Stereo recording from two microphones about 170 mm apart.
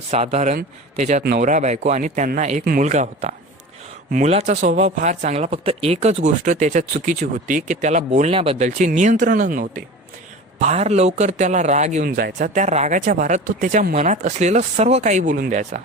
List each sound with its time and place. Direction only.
0.1 s speech: 40° right (ahead or behind)
10.6 s speech: 40° right (ahead or behind)
12.0 s speech: 60° right (ahead or behind)